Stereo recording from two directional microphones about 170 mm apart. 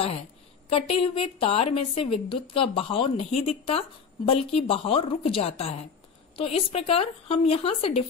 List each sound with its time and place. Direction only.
0.7 s speech: 35° left (ahead or behind)